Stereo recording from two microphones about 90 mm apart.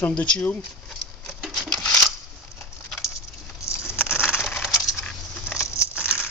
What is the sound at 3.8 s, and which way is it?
Crushing, 25° left (ahead or behind).